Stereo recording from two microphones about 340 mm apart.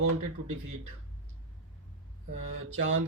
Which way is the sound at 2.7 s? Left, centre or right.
Right.